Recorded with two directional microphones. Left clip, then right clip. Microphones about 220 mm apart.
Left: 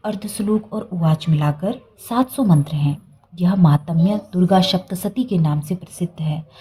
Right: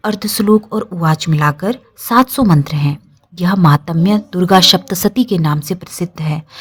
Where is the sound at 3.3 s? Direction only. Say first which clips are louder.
Right 7 dB; 45° right (ahead or behind).